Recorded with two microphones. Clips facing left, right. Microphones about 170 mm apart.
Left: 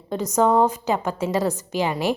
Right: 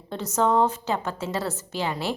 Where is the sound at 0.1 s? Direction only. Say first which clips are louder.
Left 4 dB; 15° left (ahead or behind).